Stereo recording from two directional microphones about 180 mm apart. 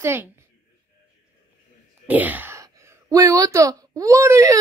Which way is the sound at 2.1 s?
10° right (ahead or behind).